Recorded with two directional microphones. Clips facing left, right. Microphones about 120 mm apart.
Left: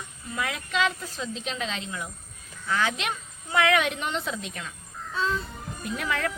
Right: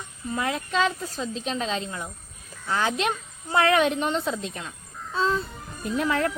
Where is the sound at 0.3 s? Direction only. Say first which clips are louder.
Right 3 dB; 35° right (ahead or behind).